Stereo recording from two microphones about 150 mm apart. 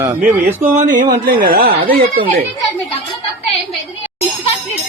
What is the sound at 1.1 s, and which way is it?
Speech, 75° right (ahead or behind).